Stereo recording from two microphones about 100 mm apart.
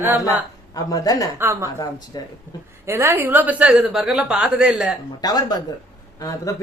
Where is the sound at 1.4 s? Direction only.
25° right (ahead or behind).